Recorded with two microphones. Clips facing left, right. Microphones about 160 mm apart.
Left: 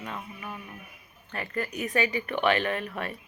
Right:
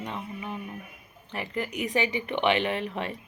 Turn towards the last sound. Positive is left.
turn(degrees=-20)  # may be behind; listen again after turning